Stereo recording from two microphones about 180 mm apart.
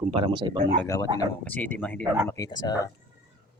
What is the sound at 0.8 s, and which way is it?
Speech, 20° left (ahead or behind).